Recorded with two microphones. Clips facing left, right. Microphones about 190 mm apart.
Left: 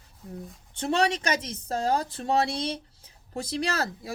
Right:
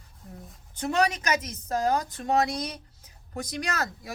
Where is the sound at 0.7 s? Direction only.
30° left (ahead or behind).